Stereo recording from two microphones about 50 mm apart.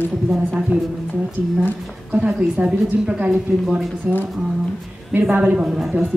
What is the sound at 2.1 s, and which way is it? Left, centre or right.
A woman's voice, right.